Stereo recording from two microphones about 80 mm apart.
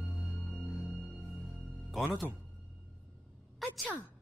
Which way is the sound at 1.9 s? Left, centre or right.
Centre.